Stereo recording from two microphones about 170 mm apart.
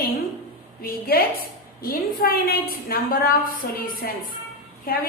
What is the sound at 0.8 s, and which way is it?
A woman's voice, 60° left (ahead or behind).